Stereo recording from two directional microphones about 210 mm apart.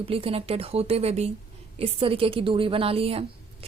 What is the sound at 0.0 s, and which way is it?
A woman's voice, 25° right (ahead or behind).